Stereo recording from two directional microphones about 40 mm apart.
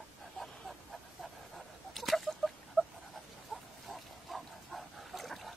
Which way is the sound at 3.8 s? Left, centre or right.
Centre.